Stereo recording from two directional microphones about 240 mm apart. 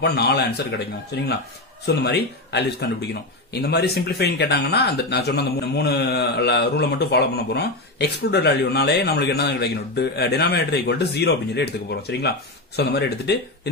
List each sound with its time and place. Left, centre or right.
0.0 s speech: left